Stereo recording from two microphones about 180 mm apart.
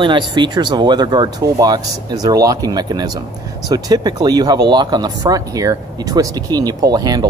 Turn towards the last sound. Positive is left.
turn(degrees=-20)  # may be behind; listen again after turning